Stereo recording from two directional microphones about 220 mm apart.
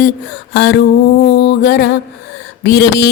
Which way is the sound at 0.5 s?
50° left (ahead or behind).